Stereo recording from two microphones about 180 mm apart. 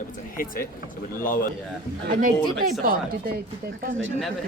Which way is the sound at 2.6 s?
55° right (ahead or behind).